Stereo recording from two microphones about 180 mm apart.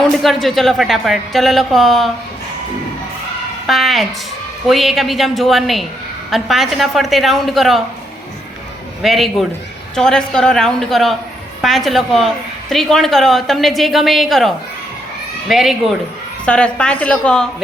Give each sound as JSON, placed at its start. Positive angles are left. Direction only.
{"t": 0.2, "sound": "speech", "side_deg": 0}
{"t": 3.7, "sound": "speech", "side_deg": 0}
{"t": 9.0, "sound": "a woman's voice", "side_deg": 0}